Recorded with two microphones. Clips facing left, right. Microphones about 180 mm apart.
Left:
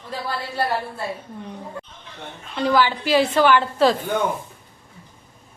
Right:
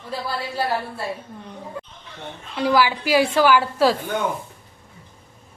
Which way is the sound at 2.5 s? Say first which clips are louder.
Even; 10° right (ahead or behind).